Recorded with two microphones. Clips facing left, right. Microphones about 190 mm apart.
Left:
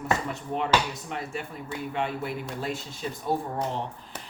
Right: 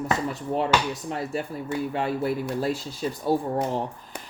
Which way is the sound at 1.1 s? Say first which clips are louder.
Right 5 dB; 35° right (ahead or behind).